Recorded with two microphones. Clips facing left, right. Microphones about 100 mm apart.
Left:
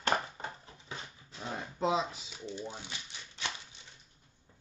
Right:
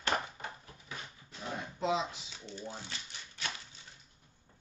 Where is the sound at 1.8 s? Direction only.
35° left (ahead or behind).